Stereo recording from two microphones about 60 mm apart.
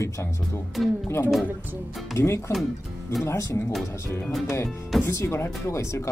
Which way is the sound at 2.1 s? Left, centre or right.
Left.